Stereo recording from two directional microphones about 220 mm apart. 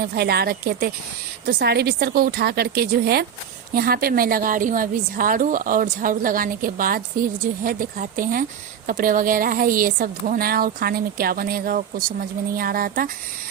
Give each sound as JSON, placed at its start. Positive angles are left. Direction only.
{"t": 0.0, "sound": "a woman's voice", "side_deg": -45}